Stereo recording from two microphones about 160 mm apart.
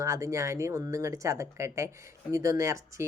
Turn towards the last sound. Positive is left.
turn(degrees=-20)  # may be behind; listen again after turning